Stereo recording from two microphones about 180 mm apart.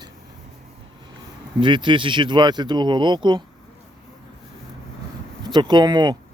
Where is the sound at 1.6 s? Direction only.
25° right (ahead or behind).